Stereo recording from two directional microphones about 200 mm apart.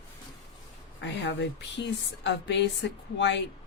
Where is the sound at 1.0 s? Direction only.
65° left (ahead or behind).